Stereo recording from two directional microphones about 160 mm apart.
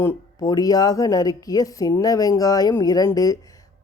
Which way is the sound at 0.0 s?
20° left (ahead or behind).